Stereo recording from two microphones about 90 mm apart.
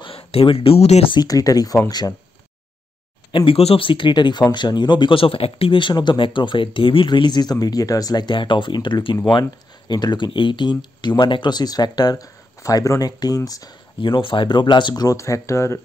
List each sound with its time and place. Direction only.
0.0 s speech: 90° left
1.2 s speech: 40° left (ahead or behind)
3.3 s speech: 80° left; by 7.5 s 55° left (ahead or behind)
7.6 s speech: 45° left (ahead or behind)
13.9 s speech: 70° left (ahead or behind)
15.0 s speech: 35° left (ahead or behind)